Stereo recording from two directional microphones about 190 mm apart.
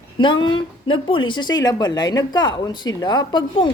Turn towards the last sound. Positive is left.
turn(degrees=20)  # may be behind; listen again after turning